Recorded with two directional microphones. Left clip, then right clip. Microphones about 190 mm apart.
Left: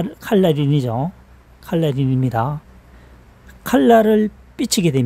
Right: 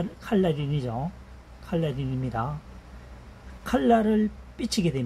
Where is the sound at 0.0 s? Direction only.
80° left.